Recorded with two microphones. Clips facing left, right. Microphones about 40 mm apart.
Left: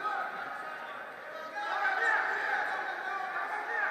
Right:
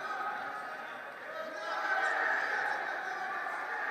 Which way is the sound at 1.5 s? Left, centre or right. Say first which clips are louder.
Left 3 dB; left.